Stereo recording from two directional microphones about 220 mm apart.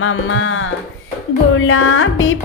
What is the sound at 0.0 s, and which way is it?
Speech, 70° left (ahead or behind).